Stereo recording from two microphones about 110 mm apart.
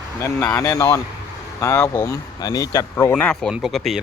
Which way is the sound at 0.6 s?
25° left (ahead or behind).